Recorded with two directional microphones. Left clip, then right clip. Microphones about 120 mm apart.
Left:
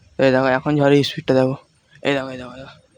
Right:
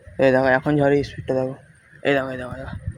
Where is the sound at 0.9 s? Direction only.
90° left.